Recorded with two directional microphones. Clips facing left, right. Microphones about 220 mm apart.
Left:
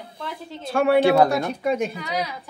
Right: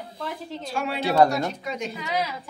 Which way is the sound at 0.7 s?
60° left (ahead or behind).